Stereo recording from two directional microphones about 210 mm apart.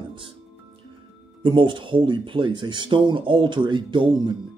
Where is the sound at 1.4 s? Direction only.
25° right (ahead or behind).